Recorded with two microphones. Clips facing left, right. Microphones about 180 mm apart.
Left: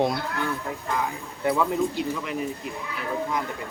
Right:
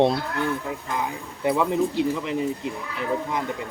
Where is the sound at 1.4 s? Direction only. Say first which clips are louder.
Right 2 dB; 20° right (ahead or behind).